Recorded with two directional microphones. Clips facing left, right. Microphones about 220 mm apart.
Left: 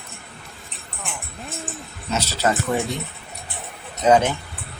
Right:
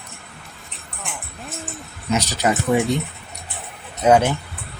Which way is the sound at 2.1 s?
15° right (ahead or behind).